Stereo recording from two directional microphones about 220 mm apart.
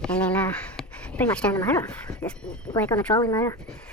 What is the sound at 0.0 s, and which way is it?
Speech, 5° left (ahead or behind).